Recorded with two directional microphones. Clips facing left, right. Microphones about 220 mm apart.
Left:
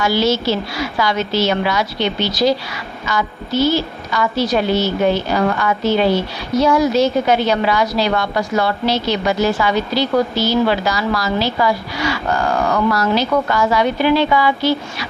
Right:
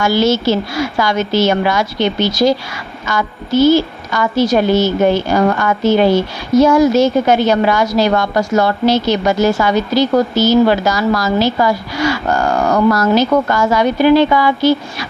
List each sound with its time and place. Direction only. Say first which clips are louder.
0.0 s a woman's voice: right 3 dB; 50° right (ahead or behind)